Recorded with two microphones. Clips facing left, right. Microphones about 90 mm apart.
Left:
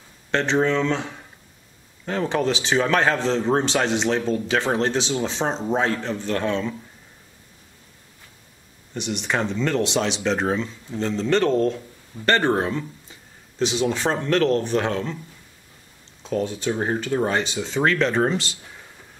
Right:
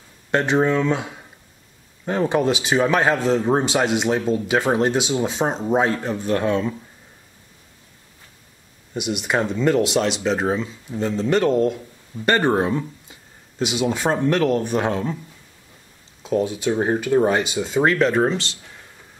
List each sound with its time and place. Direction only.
0.3 s speech: 10° right (ahead or behind)
8.9 s speech: 10° right (ahead or behind)
16.2 s speech: 5° right (ahead or behind)